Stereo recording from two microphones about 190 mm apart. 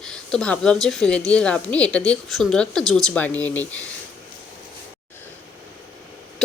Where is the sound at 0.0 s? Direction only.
5° left (ahead or behind).